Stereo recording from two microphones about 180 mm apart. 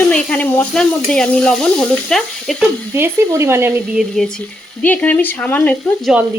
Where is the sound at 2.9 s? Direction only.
15° right (ahead or behind).